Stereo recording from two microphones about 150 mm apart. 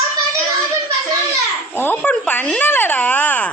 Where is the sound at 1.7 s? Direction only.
15° left (ahead or behind).